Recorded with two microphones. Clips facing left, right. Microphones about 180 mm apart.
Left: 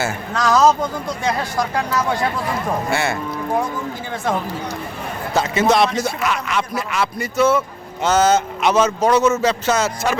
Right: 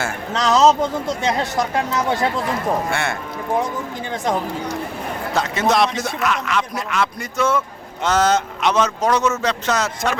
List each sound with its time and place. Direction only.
0.3 s speech: 25° right (ahead or behind)
2.9 s speech: 5° left (ahead or behind)
5.3 s speech: centre (ahead or behind)